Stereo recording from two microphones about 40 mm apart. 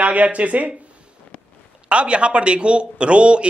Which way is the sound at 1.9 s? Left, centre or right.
Right.